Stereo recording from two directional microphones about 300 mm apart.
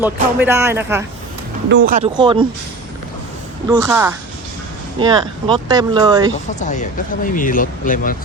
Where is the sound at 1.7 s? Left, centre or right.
Right.